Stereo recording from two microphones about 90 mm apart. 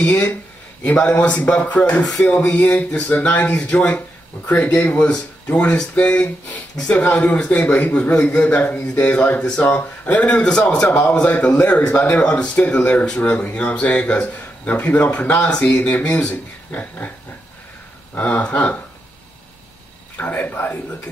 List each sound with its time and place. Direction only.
0.0 s a man's voice: 15° left (ahead or behind)
18.1 s a man's voice: 15° left (ahead or behind)
20.2 s a man's voice: 20° left (ahead or behind)